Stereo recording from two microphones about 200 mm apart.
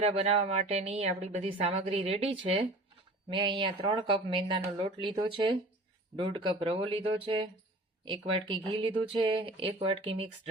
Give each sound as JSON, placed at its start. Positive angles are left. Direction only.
{"t": 0.0, "sound": "a woman's voice", "side_deg": -30}